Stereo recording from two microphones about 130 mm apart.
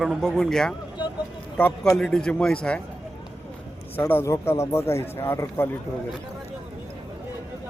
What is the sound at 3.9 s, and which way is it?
A man's voice, 15° left (ahead or behind).